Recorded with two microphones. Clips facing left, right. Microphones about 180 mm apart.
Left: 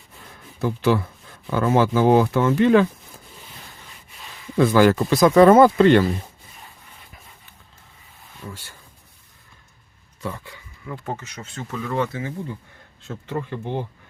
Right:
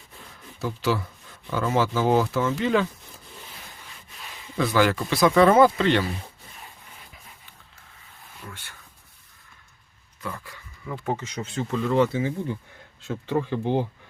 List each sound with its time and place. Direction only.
0.6 s speech: 55° left (ahead or behind)
4.5 s speech: 45° left (ahead or behind)
10.2 s speech: 20° left (ahead or behind)
10.8 s speech: 5° right (ahead or behind)
11.7 s speech: 20° right (ahead or behind)
13.1 s speech: 10° right (ahead or behind)